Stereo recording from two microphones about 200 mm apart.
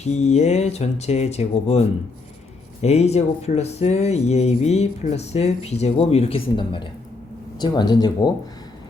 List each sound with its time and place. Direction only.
0.1 s speech: 35° left (ahead or behind)
2.8 s speech: 30° left (ahead or behind)